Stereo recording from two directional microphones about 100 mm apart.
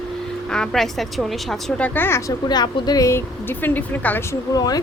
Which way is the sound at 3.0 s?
25° left (ahead or behind).